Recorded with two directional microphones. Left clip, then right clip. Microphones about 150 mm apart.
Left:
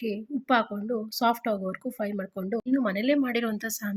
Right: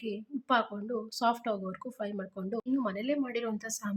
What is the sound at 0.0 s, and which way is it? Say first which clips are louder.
A woman's voice: left 6 dB; 20° left (ahead or behind).